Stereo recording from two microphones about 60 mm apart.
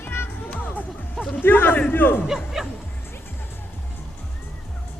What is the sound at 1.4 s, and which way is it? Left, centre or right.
Speech, left.